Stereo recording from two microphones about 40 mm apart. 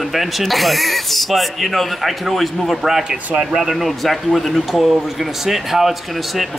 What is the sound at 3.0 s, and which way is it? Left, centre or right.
Speech, centre.